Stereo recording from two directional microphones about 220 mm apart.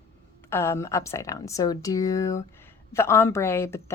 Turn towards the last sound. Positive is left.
turn(degrees=10)  # may be behind; listen again after turning